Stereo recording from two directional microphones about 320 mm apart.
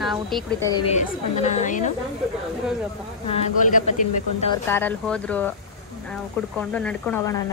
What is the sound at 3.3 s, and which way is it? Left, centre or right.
Speech, left.